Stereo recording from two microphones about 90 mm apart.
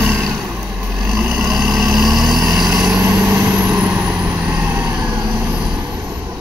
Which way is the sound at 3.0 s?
25° right (ahead or behind).